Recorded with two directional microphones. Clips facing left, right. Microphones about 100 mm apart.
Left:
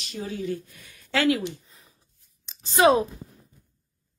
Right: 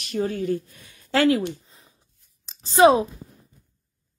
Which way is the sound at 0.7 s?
30° right (ahead or behind).